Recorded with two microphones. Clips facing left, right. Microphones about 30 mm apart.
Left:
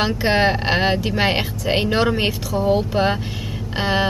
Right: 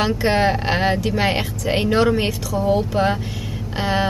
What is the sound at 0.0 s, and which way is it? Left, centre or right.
Speech, centre.